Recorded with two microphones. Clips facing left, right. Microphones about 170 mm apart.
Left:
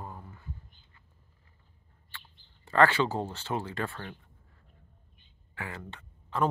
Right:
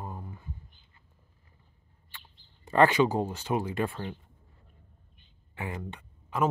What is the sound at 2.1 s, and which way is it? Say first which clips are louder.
Speech: left 1 dB; 15° right (ahead or behind).